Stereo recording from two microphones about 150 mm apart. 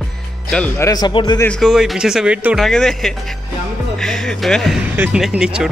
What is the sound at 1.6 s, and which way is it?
Speech, centre (ahead or behind).